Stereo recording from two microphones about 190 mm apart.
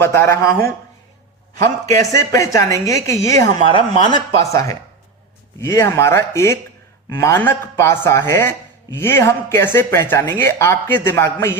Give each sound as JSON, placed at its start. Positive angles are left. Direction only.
{"t": 0.0, "sound": "speech", "side_deg": 15}